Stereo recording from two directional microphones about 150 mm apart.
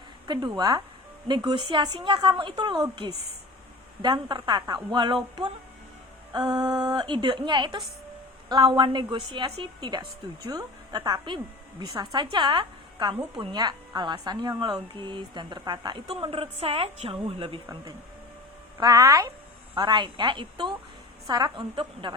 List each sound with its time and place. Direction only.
0.3 s speech: 30° right (ahead or behind)
6.3 s a woman's voice: 25° right (ahead or behind)
18.8 s speech: 25° right (ahead or behind)